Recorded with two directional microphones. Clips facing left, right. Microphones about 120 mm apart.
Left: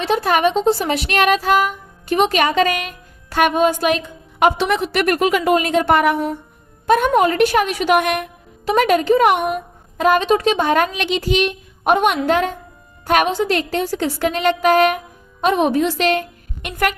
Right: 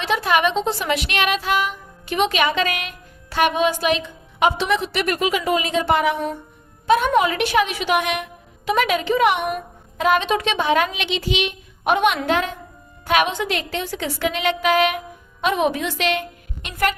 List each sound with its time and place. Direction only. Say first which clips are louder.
0.0 s speech: left 3 dB; 40° left (ahead or behind)